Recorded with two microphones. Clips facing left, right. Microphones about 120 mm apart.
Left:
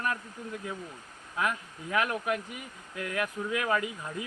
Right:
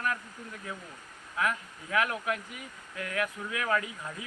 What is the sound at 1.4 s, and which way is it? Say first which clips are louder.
Speech: even; 20° left (ahead or behind).